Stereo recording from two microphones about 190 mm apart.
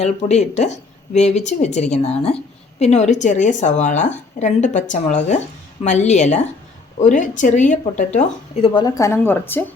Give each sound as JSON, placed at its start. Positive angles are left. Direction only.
{"t": 0.0, "sound": "speech", "side_deg": 35}
{"t": 8.6, "sound": "a woman's voice", "side_deg": 20}